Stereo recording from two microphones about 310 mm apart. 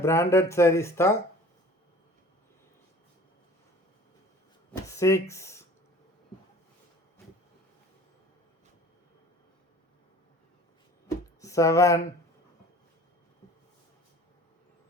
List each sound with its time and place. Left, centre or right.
0.0 s speech: centre
4.9 s a sound: centre
5.3 s speech: centre
11.3 s speech: centre